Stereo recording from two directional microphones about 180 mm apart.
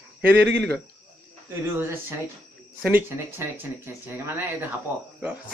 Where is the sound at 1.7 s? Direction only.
15° right (ahead or behind).